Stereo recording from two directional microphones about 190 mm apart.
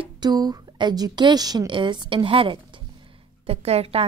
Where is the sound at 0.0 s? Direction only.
20° right (ahead or behind).